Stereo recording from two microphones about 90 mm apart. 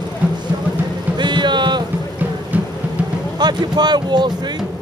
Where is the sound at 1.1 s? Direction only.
60° right (ahead or behind).